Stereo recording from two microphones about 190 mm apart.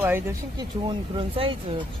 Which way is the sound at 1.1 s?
30° right (ahead or behind).